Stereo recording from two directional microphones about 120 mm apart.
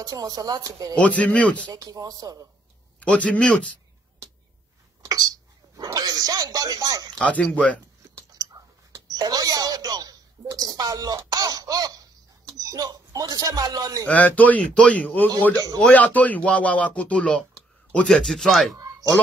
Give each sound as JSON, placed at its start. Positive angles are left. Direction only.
{"t": 0.0, "sound": "speech", "side_deg": -30}
{"t": 0.9, "sound": "a man's voice", "side_deg": 10}
{"t": 1.7, "sound": "speech", "side_deg": -30}
{"t": 3.0, "sound": "a man's voice", "side_deg": 10}
{"t": 5.0, "sound": "a sound", "side_deg": -30}
{"t": 5.9, "sound": "speech", "side_deg": -30}
{"t": 7.2, "sound": "a man's voice", "side_deg": 10}
{"t": 8.9, "sound": "speech", "side_deg": -30}
{"t": 14.0, "sound": "a man's voice", "side_deg": 15}
{"t": 15.5, "sound": "speech", "side_deg": -30}
{"t": 15.8, "sound": "a man's voice", "side_deg": 15}